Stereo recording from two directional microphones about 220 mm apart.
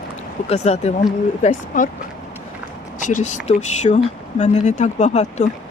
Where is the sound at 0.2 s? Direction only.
30° left (ahead or behind).